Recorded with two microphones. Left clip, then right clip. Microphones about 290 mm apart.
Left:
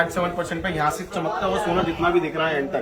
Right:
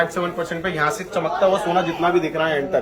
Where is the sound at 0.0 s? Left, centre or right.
Centre.